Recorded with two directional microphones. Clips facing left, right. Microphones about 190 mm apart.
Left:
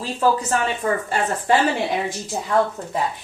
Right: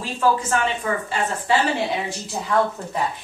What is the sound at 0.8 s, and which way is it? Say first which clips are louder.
Speech: left 3 dB; 45° left (ahead or behind).